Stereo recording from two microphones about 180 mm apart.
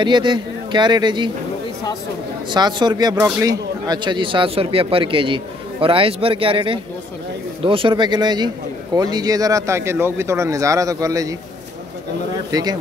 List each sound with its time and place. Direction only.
0.0 s speech: 25° right (ahead or behind)
2.5 s speech: 25° right (ahead or behind)
12.4 s speech: 20° right (ahead or behind)